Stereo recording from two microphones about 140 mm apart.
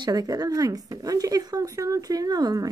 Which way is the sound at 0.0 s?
25° right (ahead or behind).